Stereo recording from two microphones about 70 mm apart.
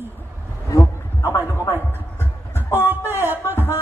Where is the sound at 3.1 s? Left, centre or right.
Right.